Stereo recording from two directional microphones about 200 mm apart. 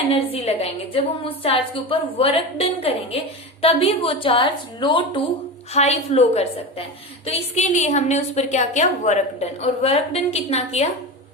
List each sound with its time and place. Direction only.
0.1 s a woman's voice: 30° left (ahead or behind)